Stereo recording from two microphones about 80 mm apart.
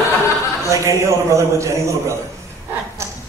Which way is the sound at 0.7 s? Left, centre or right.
Right.